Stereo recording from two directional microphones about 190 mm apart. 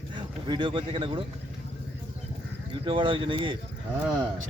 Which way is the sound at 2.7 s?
25° right (ahead or behind).